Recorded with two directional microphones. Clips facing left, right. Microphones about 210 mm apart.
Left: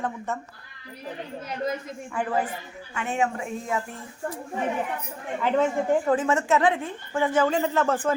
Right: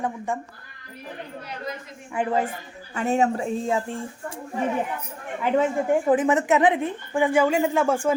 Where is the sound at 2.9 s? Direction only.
40° right (ahead or behind).